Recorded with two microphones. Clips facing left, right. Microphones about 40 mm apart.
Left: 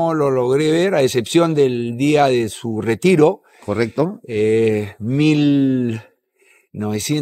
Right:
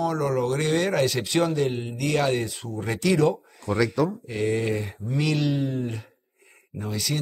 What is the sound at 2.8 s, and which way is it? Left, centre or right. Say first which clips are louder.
Speech: left 9 dB; left.